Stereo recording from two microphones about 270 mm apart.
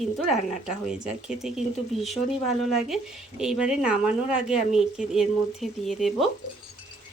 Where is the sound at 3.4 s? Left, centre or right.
Centre.